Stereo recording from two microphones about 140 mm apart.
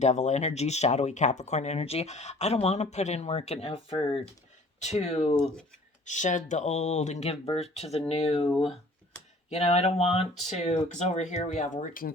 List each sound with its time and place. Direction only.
0.0 s speech: 55° left (ahead or behind); by 4.2 s 40° left (ahead or behind)
4.8 s speech: 55° left (ahead or behind)
6.1 s speech: 60° left (ahead or behind); by 8.8 s 40° left (ahead or behind)
9.5 s speech: 50° left (ahead or behind); by 12.1 s 75° left (ahead or behind)